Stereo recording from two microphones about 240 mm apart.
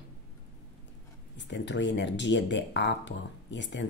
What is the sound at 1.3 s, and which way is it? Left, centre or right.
Speech, left.